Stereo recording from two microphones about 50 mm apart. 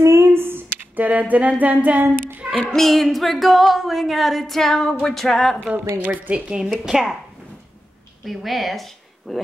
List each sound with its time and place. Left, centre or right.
0.0 s a sound: right
0.4 s humming: right
2.1 s a sound: right
2.7 s music: centre
5.6 s a woman's voice: right
6.8 s speech: centre
8.2 s music: centre